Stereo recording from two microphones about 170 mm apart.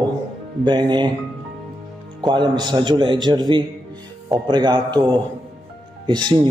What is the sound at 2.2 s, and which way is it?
A man's voice, 25° right (ahead or behind).